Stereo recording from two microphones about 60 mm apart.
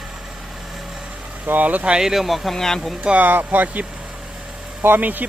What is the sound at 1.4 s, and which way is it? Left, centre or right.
Speech, right.